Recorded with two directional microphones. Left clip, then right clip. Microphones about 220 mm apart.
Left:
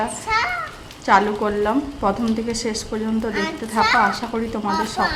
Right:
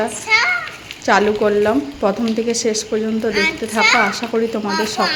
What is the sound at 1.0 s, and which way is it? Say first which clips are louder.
Speech: right 2 dB; 10° right (ahead or behind).